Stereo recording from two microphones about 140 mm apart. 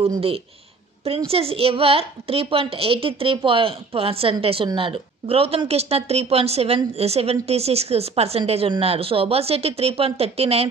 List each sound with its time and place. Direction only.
1.3 s a woman's voice: 45° right (ahead or behind)